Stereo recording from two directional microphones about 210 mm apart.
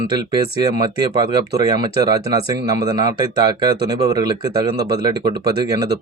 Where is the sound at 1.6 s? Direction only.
20° right (ahead or behind).